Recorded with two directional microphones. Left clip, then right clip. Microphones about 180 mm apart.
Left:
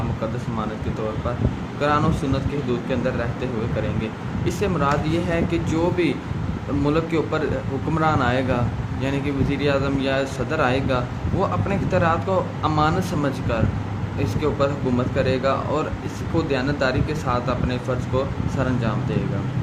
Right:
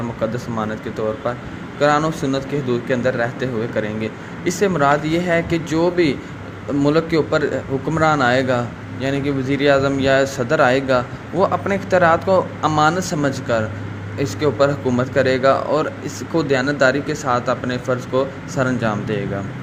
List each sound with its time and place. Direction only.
1.8 s speech: 25° right (ahead or behind)